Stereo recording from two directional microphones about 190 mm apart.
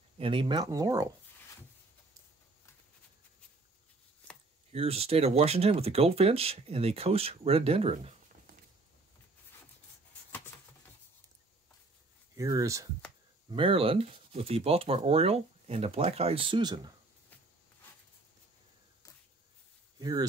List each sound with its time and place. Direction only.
0.2 s speech: 25° right (ahead or behind)
4.7 s speech: 30° right (ahead or behind)
12.4 s speech: 20° right (ahead or behind)
13.5 s speech: 30° right (ahead or behind)
20.0 s speech: 20° right (ahead or behind)